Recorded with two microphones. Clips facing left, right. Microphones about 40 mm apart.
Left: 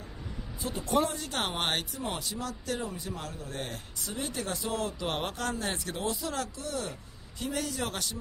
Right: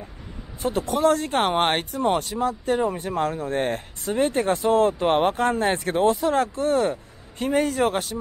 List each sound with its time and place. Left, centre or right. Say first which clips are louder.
0.6 s speech: right 9 dB; right
1.9 s speech: right 13 dB; right
2.9 s speech: right 14 dB; right